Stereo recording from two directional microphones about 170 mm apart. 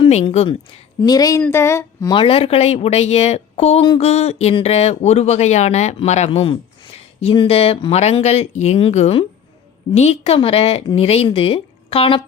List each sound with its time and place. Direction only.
0.1 s a woman's voice: 40° left (ahead or behind); by 2.1 s 20° left (ahead or behind)
2.1 s speech: 35° left (ahead or behind)